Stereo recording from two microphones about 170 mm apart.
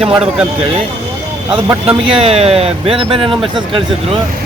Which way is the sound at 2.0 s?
35° right (ahead or behind).